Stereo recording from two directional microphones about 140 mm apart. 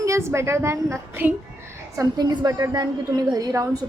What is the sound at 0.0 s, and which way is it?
A woman's voice, 20° right (ahead or behind).